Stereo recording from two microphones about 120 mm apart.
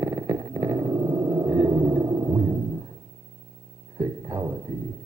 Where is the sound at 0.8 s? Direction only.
30° right (ahead or behind).